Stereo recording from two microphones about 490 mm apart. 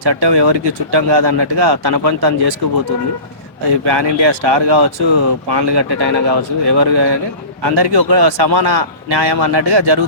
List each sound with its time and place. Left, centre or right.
0.0 s speech: right
3.8 s speech: right